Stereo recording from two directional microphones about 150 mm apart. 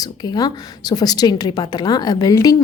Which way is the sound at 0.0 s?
25° left (ahead or behind).